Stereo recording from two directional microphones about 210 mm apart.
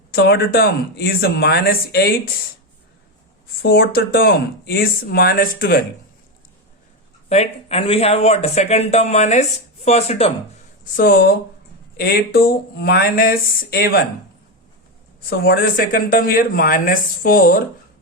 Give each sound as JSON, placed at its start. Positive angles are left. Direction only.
{"t": 0.1, "sound": "speech", "side_deg": 50}
{"t": 3.6, "sound": "speech", "side_deg": 45}
{"t": 7.3, "sound": "speech", "side_deg": 30}
{"t": 10.9, "sound": "speech", "side_deg": 45}
{"t": 15.3, "sound": "speech", "side_deg": 45}